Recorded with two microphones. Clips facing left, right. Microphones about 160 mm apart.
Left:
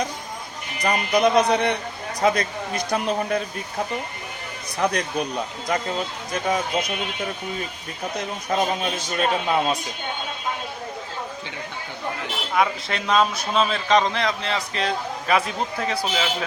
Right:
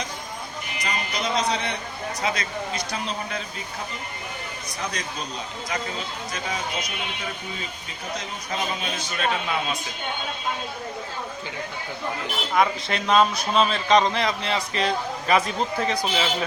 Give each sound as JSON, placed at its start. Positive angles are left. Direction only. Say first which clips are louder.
{"t": 0.8, "sound": "speech", "louder": "left 10 dB", "side_deg": 55}
{"t": 4.8, "sound": "speech", "louder": "left 9 dB", "side_deg": 60}
{"t": 8.2, "sound": "speech", "louder": "left 9 dB", "side_deg": 50}
{"t": 12.5, "sound": "a man's voice", "louder": "even", "side_deg": 0}